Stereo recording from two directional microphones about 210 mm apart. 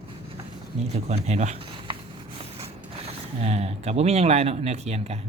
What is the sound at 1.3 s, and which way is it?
Speech, 35° right (ahead or behind).